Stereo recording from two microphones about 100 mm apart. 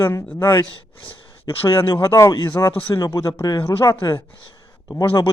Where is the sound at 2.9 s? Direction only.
35° left (ahead or behind).